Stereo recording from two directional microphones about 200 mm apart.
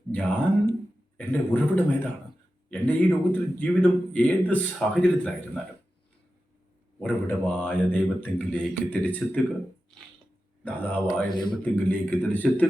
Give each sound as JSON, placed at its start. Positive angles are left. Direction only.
{"t": 0.1, "sound": "speech", "side_deg": 10}
{"t": 7.0, "sound": "speech", "side_deg": 10}
{"t": 10.6, "sound": "speech", "side_deg": 5}
{"t": 11.3, "sound": "a man's voice", "side_deg": 20}
{"t": 11.6, "sound": "speech", "side_deg": 10}